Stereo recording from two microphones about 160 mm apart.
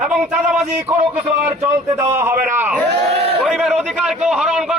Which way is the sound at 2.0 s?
15° right (ahead or behind).